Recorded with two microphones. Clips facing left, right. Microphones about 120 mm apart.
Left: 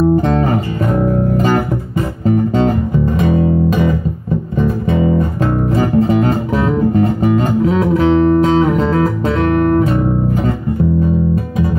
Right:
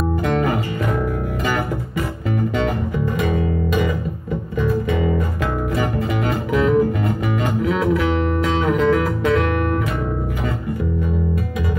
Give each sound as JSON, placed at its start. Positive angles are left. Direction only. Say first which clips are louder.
{"t": 0.1, "sound": "music", "louder": "left 6 dB", "side_deg": 40}